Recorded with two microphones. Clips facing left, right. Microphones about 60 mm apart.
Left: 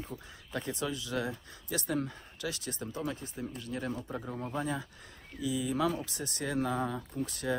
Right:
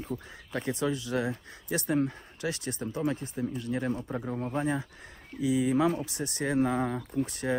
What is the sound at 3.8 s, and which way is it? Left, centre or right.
Speech, right.